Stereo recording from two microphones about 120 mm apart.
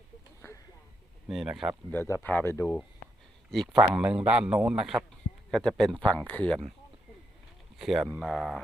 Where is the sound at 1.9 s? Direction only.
20° left (ahead or behind).